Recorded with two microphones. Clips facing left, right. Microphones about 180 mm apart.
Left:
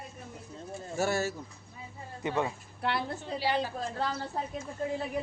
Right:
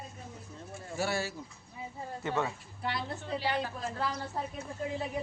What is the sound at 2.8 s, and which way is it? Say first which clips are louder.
Speech: left 4 dB; 70° left (ahead or behind).